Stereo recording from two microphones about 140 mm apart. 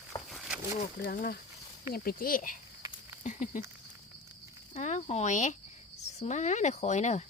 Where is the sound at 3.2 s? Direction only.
60° left (ahead or behind).